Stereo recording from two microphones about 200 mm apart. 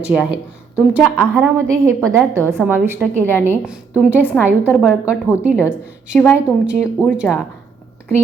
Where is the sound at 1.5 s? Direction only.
15° right (ahead or behind).